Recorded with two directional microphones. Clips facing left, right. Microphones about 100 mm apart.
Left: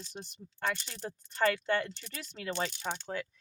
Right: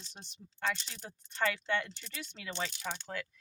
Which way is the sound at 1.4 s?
40° left (ahead or behind).